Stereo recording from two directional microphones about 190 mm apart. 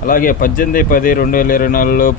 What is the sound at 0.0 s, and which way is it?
A man's voice, 45° left (ahead or behind).